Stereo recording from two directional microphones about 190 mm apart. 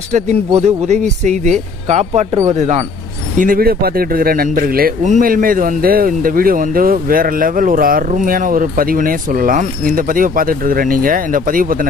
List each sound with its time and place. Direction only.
0.1 s speech: 35° right (ahead or behind)
3.3 s speech: 45° right (ahead or behind)